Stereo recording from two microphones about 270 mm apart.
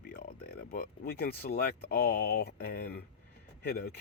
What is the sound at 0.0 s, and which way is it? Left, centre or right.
Speech, left.